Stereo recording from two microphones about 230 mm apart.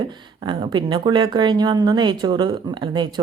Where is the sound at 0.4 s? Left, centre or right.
Centre.